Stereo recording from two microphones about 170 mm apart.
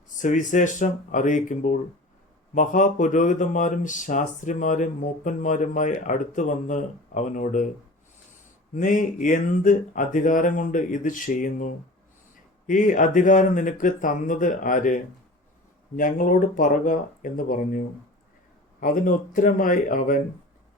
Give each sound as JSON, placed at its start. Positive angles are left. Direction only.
{"t": 0.2, "sound": "speech", "side_deg": 50}
{"t": 8.7, "sound": "speech", "side_deg": 50}